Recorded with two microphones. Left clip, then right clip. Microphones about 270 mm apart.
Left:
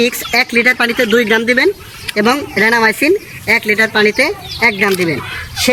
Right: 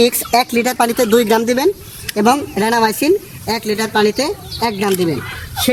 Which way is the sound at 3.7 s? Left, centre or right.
Centre.